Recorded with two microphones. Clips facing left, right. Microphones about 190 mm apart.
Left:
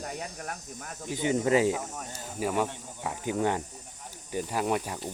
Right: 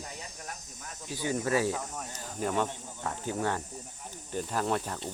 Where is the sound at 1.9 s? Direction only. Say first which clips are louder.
Left 1 dB; 5° left (ahead or behind).